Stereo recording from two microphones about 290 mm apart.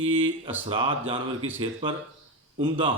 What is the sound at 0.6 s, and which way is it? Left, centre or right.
Speech, centre.